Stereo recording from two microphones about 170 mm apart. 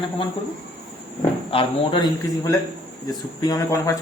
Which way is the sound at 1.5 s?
30° left (ahead or behind).